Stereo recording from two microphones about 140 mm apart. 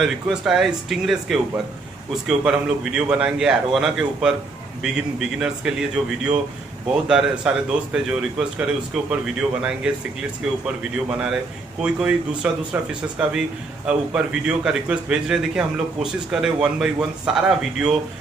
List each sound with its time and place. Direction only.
0.0 s a man's voice: 5° right (ahead or behind)
10.8 s a man's voice: 5° right (ahead or behind)